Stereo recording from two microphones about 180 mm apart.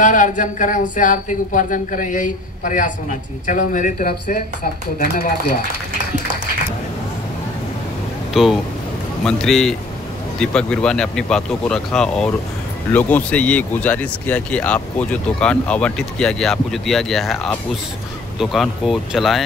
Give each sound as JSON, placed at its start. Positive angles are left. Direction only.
{"t": 0.0, "sound": "speech", "side_deg": 45}
{"t": 8.3, "sound": "speech", "side_deg": 0}